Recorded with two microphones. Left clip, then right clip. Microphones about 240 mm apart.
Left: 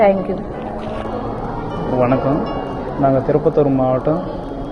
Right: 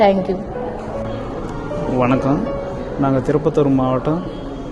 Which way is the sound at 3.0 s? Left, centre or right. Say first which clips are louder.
Left 3 dB; right.